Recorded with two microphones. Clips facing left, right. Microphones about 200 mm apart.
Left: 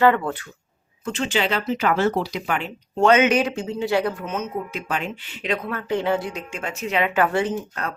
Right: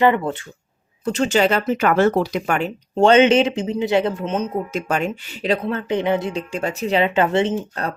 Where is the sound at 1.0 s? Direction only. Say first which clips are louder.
Right 6 dB; 40° right (ahead or behind).